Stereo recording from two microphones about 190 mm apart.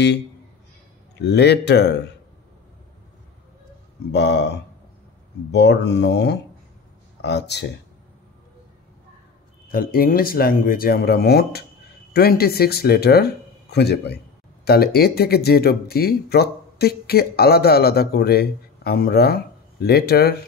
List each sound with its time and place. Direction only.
1.2 s speech: 60° left (ahead or behind)
4.1 s speech: 65° left (ahead or behind)
9.7 s speech: 50° left (ahead or behind)